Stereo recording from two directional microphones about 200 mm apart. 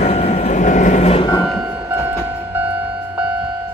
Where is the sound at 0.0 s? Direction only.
30° left (ahead or behind).